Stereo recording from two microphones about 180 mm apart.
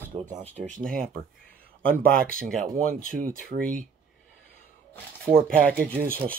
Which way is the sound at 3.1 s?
50° right (ahead or behind).